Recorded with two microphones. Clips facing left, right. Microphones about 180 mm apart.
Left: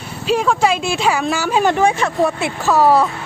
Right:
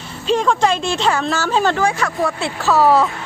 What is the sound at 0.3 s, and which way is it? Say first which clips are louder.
Speech: even; 5° left (ahead or behind).